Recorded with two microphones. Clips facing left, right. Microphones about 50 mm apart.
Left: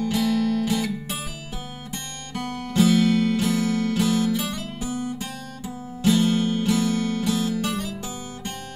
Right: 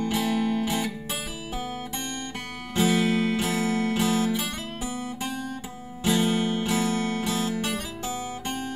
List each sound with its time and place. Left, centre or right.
0.0 s music: right
2.3 s music: centre